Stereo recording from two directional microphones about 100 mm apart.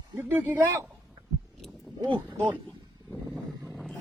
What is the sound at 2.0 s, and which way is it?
Speech, 55° right (ahead or behind).